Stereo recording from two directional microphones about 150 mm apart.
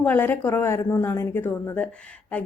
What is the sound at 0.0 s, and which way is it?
A woman's voice, 10° left (ahead or behind).